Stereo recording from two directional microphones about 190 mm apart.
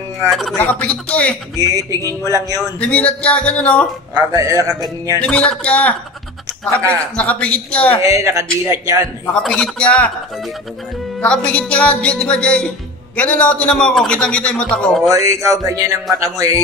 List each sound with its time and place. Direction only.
0.3 s a man's voice: centre (ahead or behind)
1.7 s a man's voice: 20° right (ahead or behind)
2.8 s a man's voice: 5° left (ahead or behind)
4.3 s a man's voice: 15° right (ahead or behind)
5.2 s music: 5° left (ahead or behind)
6.9 s a man's voice: 5° left (ahead or behind)
8.0 s a man's voice: 15° right (ahead or behind)
9.2 s music: 5° left (ahead or behind)
11.1 s music: 5° left (ahead or behind)
15.0 s a man's voice: 15° right (ahead or behind)